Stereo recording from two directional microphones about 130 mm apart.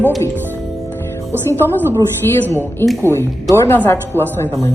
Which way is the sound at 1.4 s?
15° left (ahead or behind).